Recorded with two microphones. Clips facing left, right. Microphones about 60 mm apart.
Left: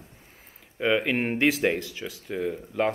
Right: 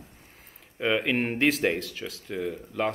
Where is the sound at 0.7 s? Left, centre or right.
Centre.